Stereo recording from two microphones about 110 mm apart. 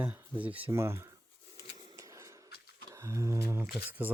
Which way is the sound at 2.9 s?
25° right (ahead or behind).